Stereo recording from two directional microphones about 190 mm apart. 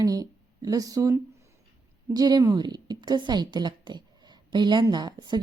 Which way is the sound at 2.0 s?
20° right (ahead or behind).